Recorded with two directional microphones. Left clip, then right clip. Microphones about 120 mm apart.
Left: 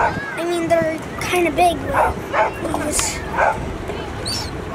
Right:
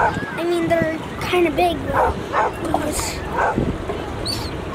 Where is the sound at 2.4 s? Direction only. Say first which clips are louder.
Left 2 dB; 25° left (ahead or behind).